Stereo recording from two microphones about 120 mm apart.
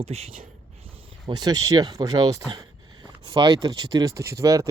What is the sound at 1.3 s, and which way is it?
Speech, 35° right (ahead or behind).